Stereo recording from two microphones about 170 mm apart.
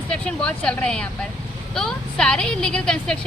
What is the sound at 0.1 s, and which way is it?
A woman's voice, 5° left (ahead or behind).